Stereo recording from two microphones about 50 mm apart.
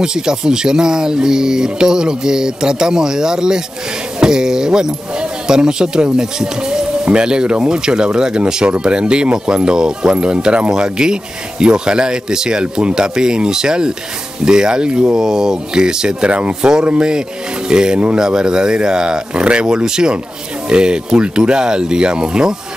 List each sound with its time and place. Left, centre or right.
0.0 s speech: centre